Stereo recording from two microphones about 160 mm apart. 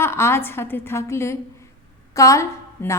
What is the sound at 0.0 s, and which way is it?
A woman's voice, 15° left (ahead or behind).